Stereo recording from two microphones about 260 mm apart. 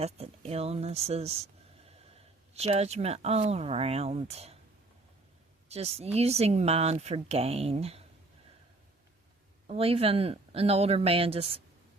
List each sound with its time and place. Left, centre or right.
0.0 s speech: right
2.5 s speech: right
5.6 s a woman's voice: right
9.6 s speech: right